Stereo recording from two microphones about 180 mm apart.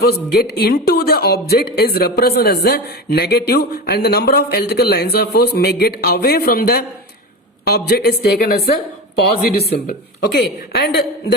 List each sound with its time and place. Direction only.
0.0 s speech: 60° left (ahead or behind)